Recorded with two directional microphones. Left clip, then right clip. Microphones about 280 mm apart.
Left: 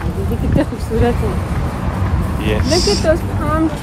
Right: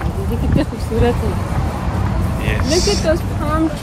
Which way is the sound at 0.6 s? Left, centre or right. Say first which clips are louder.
Left 3 dB; centre.